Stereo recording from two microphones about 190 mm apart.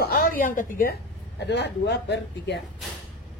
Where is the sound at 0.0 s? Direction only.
50° left (ahead or behind).